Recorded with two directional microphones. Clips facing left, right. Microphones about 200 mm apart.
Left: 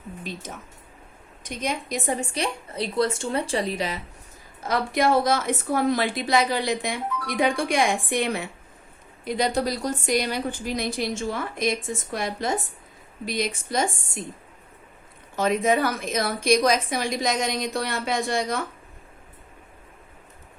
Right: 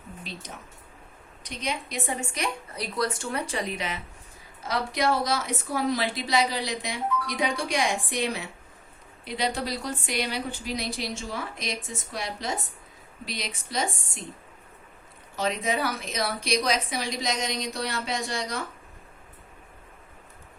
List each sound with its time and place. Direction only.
1.5 s a woman's voice: 45° left (ahead or behind)
2.3 s speech: 30° left (ahead or behind)
4.7 s a woman's voice: 50° left (ahead or behind)
15.4 s a woman's voice: 50° left (ahead or behind)